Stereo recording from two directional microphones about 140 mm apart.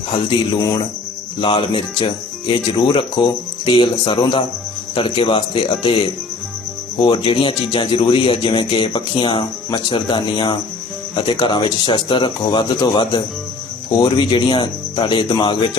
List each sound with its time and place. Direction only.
0.1 s speech: 40° left (ahead or behind)